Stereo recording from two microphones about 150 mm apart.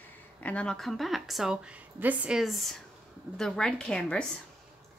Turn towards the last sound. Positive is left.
turn(degrees=5)  # may be behind; listen again after turning